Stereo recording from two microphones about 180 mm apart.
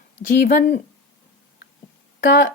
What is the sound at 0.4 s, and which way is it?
Speech, 55° left (ahead or behind).